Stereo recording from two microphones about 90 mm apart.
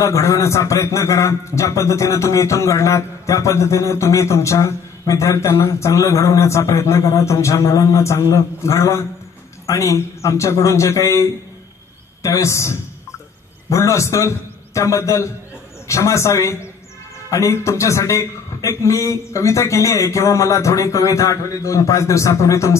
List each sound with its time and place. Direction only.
0.0 s a man's voice: 35° left (ahead or behind)